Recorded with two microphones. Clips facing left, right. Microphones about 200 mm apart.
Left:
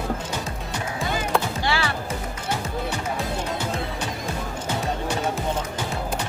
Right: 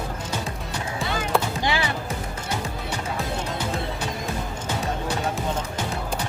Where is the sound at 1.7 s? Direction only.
20° right (ahead or behind).